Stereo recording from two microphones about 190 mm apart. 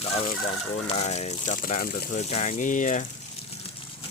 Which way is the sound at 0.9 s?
35° left (ahead or behind).